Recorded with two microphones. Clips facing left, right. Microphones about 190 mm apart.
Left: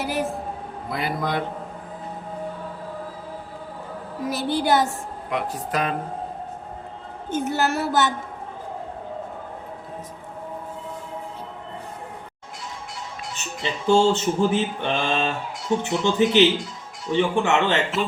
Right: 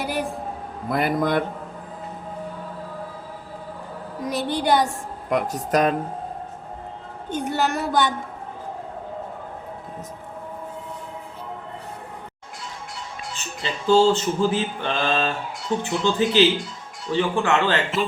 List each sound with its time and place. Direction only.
0.0 s a sound: centre (ahead or behind)
0.9 s a man's voice: 50° right (ahead or behind)
4.2 s speech: 5° left (ahead or behind)
5.3 s a man's voice: 45° right (ahead or behind)
7.3 s speech: 5° left (ahead or behind)
13.6 s music: 20° left (ahead or behind)